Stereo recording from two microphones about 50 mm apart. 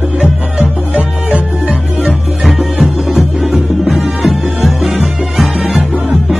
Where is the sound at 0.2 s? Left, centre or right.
Centre.